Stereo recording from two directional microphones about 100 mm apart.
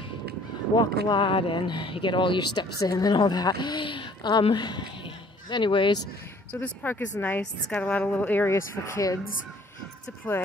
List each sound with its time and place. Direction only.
0.7 s speech: 50° left (ahead or behind)
6.6 s a woman's voice: 20° left (ahead or behind)